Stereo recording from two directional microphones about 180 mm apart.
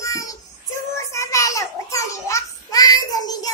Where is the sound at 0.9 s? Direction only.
15° left (ahead or behind).